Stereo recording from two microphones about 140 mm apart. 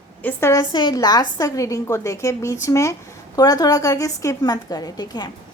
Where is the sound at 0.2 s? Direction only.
15° left (ahead or behind).